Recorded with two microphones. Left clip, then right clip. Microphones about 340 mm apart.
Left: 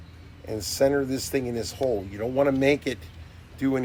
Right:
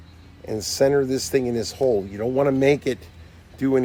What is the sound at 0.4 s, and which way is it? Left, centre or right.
Speech, right.